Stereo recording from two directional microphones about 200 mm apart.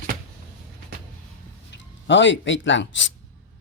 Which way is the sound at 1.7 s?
65° left (ahead or behind).